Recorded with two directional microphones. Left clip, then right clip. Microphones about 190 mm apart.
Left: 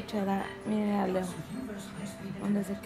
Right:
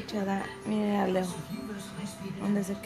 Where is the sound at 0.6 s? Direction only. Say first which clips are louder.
Right 3 dB; 20° right (ahead or behind).